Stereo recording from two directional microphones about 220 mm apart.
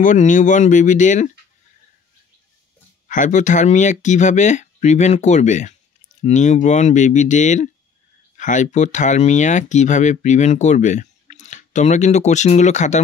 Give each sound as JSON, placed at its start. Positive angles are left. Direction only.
{"t": 0.0, "sound": "speech", "side_deg": 35}
{"t": 3.1, "sound": "speech", "side_deg": 35}